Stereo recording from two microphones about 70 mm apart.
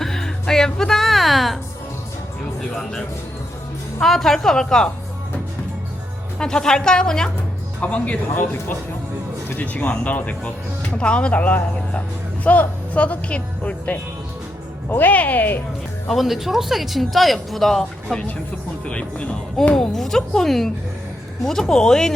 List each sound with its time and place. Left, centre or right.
0.0 s music: centre
4.0 s speech: centre
6.4 s speech: centre
9.6 s speech: left
16.0 s speech: centre
18.9 s speech: centre
19.7 s speech: centre